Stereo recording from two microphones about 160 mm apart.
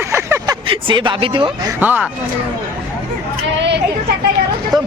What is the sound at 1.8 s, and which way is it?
Speech, 10° right (ahead or behind).